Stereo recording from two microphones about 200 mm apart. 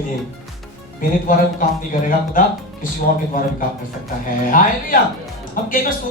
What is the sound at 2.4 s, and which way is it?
Speech, 45° left (ahead or behind).